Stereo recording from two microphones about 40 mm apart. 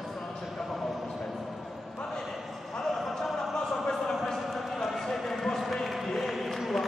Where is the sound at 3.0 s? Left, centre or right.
Centre.